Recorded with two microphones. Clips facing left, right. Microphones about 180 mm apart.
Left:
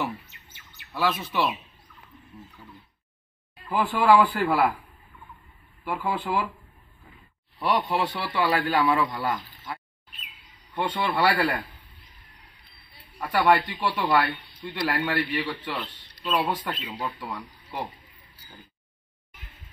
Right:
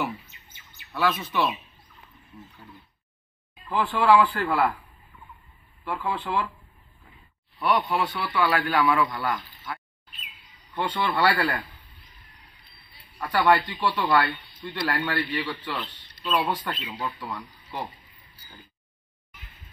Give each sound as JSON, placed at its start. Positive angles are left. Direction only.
{"t": 0.9, "sound": "speech", "side_deg": 5}
{"t": 3.6, "sound": "speech", "side_deg": 10}
{"t": 5.9, "sound": "speech", "side_deg": 10}
{"t": 7.5, "sound": "a man's voice", "side_deg": 30}
{"t": 10.7, "sound": "speech", "side_deg": 10}
{"t": 13.3, "sound": "speech", "side_deg": 15}